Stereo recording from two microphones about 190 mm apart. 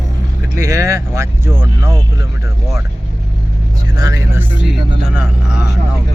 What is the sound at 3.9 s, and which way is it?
Speech, 20° right (ahead or behind).